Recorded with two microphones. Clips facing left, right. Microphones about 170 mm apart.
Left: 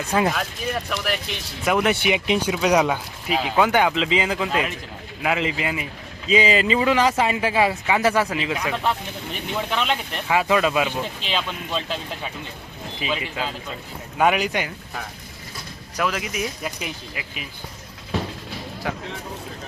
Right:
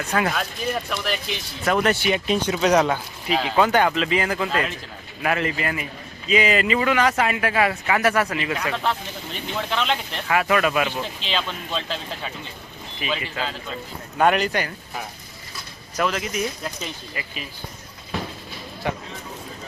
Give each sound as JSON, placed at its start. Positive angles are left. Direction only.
{"t": 0.1, "sound": "speech", "side_deg": 15}
{"t": 0.3, "sound": "speech", "side_deg": 0}
{"t": 6.3, "sound": "speech", "side_deg": 30}
{"t": 8.5, "sound": "speech", "side_deg": 5}
{"t": 16.0, "sound": "speech", "side_deg": 5}
{"t": 18.8, "sound": "speech", "side_deg": 0}